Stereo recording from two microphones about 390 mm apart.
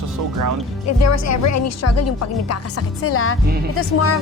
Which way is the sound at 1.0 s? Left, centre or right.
Left.